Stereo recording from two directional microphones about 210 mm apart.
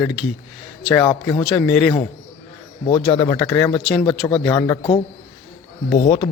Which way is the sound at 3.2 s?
5° left (ahead or behind).